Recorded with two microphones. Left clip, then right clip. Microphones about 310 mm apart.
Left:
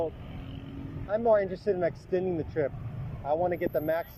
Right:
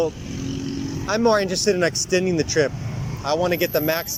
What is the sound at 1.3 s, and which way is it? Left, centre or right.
Speech, right.